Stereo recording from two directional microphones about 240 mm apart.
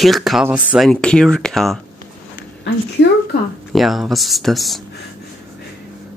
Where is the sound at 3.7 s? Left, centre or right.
Centre.